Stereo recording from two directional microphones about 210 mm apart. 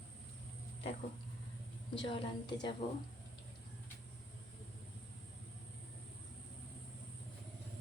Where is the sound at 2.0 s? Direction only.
25° left (ahead or behind).